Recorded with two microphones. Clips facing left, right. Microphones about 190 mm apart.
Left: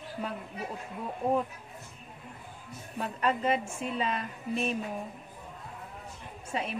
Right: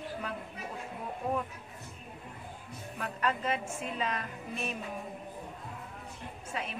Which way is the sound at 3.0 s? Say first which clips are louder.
Left 3 dB; 30° left (ahead or behind).